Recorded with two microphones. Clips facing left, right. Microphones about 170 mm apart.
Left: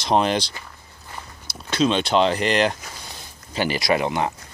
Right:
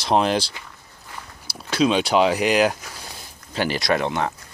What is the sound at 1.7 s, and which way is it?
Speech, 10° right (ahead or behind).